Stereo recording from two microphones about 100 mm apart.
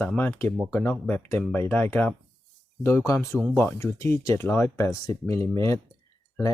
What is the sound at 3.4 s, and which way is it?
Speech, 10° right (ahead or behind).